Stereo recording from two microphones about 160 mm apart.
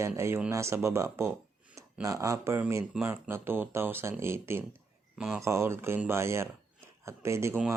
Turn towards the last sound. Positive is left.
turn(degrees=-15)  # may be behind; listen again after turning